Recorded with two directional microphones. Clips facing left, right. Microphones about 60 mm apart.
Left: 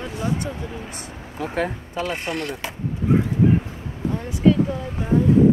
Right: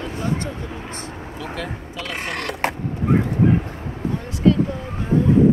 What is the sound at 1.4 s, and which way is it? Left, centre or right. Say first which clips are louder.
Speech: left 6 dB; left.